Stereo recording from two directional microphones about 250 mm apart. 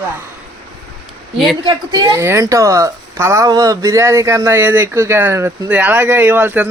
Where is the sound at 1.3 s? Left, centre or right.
Centre.